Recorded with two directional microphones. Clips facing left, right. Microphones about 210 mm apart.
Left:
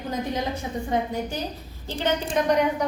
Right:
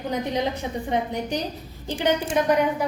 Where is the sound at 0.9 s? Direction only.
20° right (ahead or behind).